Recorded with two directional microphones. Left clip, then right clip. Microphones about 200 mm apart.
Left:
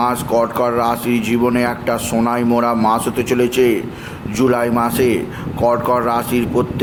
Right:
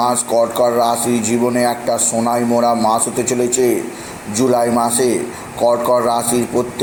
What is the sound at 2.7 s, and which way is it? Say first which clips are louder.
Speech: even; 35° left (ahead or behind).